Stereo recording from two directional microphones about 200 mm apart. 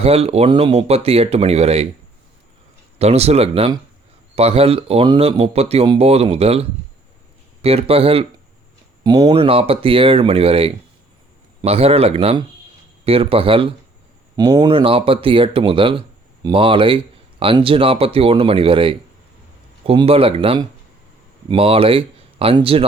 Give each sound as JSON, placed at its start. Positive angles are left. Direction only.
{"t": 0.0, "sound": "speech", "side_deg": -30}
{"t": 3.0, "sound": "speech", "side_deg": -30}